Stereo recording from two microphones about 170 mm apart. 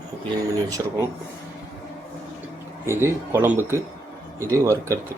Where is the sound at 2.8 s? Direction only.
15° right (ahead or behind).